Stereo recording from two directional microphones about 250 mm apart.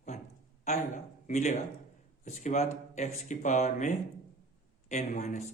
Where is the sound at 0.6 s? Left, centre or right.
Left.